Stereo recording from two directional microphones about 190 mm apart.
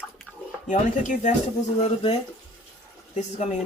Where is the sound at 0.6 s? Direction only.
40° left (ahead or behind).